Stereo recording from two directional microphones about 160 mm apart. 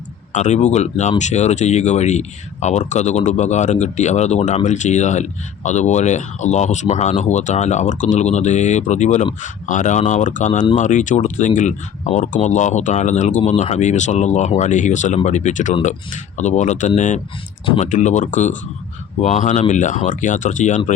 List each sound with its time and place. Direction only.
0.3 s speech: 50° left (ahead or behind)